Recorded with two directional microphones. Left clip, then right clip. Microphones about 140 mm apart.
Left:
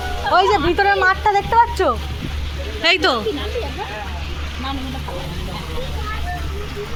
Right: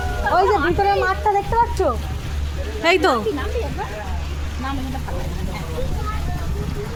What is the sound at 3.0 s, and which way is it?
Speech, 30° right (ahead or behind).